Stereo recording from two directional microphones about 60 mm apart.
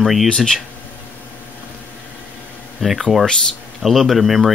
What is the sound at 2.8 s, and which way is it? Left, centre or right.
Speech, centre.